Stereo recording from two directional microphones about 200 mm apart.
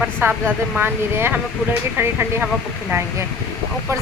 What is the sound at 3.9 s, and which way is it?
Speech, 15° right (ahead or behind).